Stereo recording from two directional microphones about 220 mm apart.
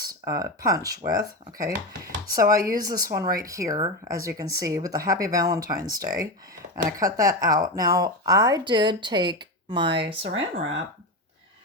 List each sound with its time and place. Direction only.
0.0 s speech: 15° right (ahead or behind)
2.3 s speech: 15° right (ahead or behind)
10.2 s speech: 60° right (ahead or behind)